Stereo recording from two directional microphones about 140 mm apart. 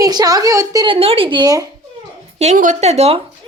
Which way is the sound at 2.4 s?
60° right (ahead or behind).